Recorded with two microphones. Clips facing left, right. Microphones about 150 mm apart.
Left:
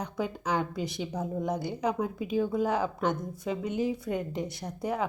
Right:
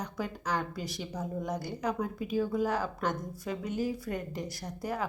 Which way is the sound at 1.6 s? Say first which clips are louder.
Left 3 dB; 5° left (ahead or behind).